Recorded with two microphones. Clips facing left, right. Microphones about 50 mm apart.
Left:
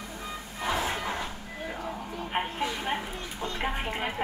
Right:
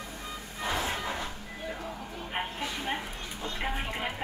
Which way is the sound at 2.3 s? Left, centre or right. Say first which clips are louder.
Left 4 dB; centre.